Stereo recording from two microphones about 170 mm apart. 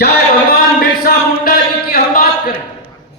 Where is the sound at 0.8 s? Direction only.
60° left (ahead or behind).